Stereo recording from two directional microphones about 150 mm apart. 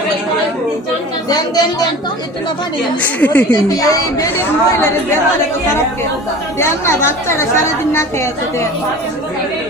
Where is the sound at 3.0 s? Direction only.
10° left (ahead or behind).